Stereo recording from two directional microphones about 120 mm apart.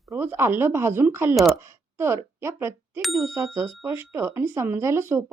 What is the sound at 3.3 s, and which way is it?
Speech, 25° right (ahead or behind).